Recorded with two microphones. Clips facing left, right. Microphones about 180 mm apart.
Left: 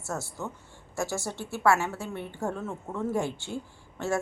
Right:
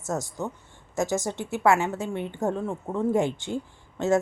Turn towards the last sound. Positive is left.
turn(degrees=-20)  # may be behind; listen again after turning